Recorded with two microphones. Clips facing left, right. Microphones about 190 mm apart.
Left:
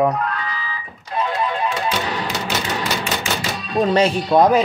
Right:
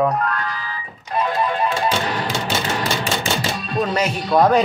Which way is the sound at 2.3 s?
30° right (ahead or behind).